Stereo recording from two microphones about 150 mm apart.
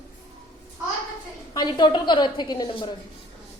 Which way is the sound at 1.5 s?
30° left (ahead or behind).